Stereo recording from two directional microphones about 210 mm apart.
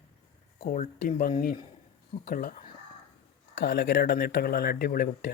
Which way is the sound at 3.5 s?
50° left (ahead or behind).